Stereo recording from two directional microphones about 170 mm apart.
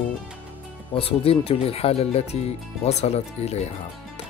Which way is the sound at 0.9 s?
35° left (ahead or behind).